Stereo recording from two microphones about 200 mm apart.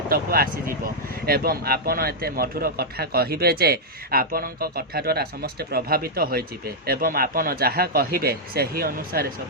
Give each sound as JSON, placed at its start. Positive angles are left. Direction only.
{"t": 0.1, "sound": "a man's voice", "side_deg": -50}